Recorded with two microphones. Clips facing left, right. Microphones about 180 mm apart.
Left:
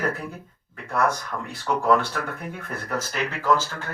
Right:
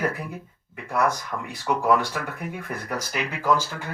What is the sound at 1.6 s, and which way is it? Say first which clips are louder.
Speech: left 1 dB; 10° right (ahead or behind).